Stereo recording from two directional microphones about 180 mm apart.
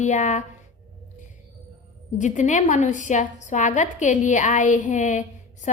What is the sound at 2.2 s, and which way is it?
A woman's voice, 45° left (ahead or behind).